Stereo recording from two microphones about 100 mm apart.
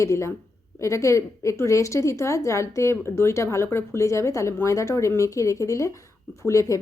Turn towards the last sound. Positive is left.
turn(degrees=30)  # may be behind; listen again after turning